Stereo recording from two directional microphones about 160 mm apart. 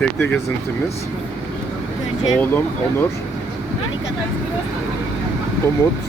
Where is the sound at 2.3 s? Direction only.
10° left (ahead or behind).